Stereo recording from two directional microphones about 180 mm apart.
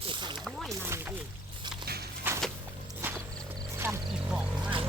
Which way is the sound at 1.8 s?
60° right (ahead or behind).